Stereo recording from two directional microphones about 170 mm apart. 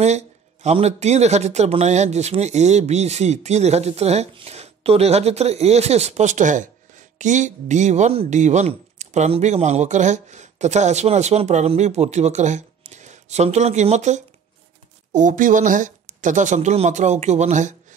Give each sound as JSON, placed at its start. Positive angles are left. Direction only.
{"t": 0.0, "sound": "a man's voice", "side_deg": -40}